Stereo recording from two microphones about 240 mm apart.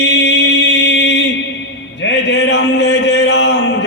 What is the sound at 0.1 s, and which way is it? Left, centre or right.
Music, left.